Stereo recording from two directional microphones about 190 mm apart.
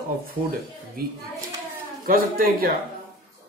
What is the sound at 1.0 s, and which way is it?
Speech, 50° right (ahead or behind).